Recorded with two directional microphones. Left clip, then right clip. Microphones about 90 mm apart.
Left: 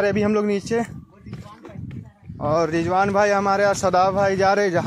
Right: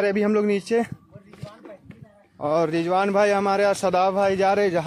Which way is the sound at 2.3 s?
20° right (ahead or behind).